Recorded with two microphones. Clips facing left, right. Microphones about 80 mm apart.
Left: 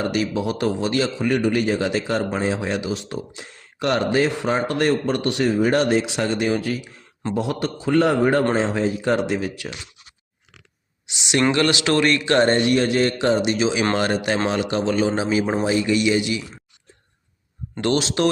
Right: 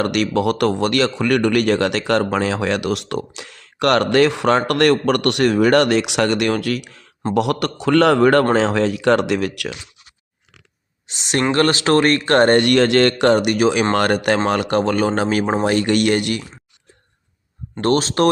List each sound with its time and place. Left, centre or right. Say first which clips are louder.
0.0 s a man's voice: right 4 dB; right
11.0 s speech: even; right
12.5 s speech: right 5 dB; right
15.6 s speech: right 3 dB; right
17.7 s speech: right 4 dB; right